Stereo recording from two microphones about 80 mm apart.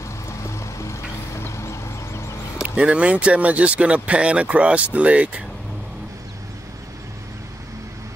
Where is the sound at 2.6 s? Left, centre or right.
Centre.